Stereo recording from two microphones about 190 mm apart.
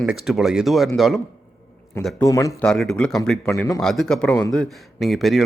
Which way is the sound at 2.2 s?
15° left (ahead or behind).